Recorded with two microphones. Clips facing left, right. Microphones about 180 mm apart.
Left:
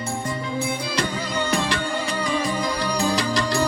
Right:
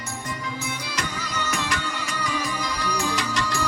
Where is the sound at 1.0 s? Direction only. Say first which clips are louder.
Left 5 dB; 30° left (ahead or behind).